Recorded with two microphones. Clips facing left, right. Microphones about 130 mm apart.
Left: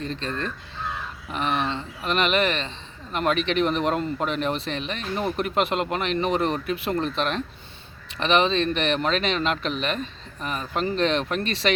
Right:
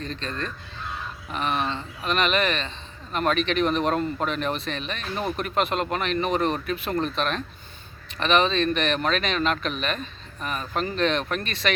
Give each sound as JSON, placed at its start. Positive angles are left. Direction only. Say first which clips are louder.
{"t": 0.0, "sound": "speech", "louder": "left 2 dB", "side_deg": 25}